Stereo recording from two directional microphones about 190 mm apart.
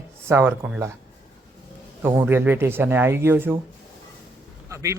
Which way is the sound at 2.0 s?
10° right (ahead or behind).